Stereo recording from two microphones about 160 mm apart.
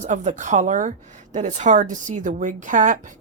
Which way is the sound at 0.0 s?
50° right (ahead or behind).